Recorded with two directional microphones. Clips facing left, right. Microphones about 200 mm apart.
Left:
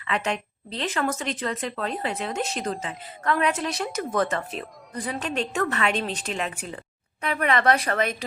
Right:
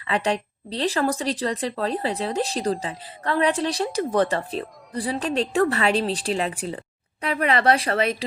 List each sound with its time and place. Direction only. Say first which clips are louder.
0.0 s speech: right 4 dB; 35° right (ahead or behind)